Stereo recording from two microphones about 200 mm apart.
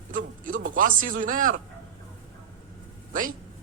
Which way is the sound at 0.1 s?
40° right (ahead or behind).